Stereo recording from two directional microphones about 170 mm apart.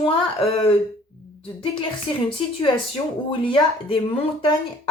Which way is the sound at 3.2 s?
30° left (ahead or behind).